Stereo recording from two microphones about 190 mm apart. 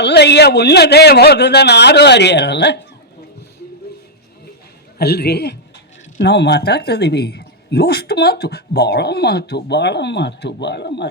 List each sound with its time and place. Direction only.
0.0 s speech: 60° left (ahead or behind)
4.9 s speech: 55° left (ahead or behind)